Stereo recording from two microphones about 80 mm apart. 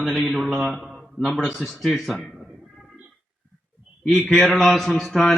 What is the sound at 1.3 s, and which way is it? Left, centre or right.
Speech, centre.